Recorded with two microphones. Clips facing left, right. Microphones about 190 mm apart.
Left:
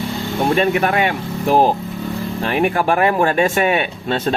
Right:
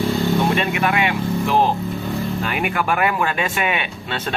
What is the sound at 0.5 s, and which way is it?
Speech, 45° left (ahead or behind).